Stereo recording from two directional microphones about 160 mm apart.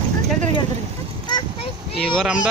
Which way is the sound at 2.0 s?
Centre (ahead or behind).